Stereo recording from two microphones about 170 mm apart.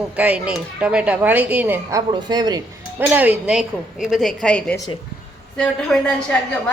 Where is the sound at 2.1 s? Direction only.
25° right (ahead or behind).